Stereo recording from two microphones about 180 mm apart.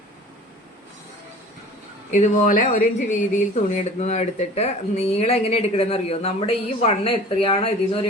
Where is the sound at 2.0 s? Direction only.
45° left (ahead or behind).